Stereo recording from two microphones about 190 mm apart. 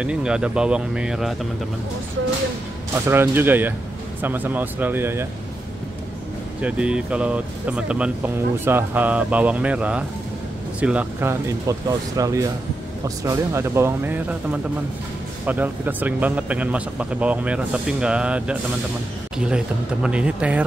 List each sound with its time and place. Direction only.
0.0 s speech: 5° right (ahead or behind)
3.1 s speech: 10° right (ahead or behind)
6.6 s speech: 5° right (ahead or behind)